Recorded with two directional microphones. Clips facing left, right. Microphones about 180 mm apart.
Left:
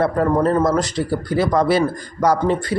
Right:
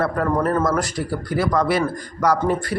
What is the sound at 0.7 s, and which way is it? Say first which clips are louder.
Speech: left 3 dB; 20° left (ahead or behind).